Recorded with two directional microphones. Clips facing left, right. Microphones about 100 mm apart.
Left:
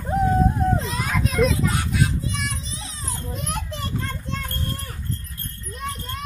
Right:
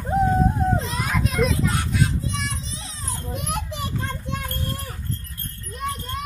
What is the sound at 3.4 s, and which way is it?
Children playing, 10° right (ahead or behind).